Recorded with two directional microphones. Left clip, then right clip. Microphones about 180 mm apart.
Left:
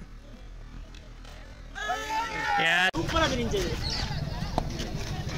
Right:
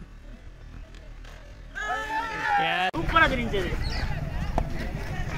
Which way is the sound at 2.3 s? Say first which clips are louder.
Right 5 dB; 15° left (ahead or behind).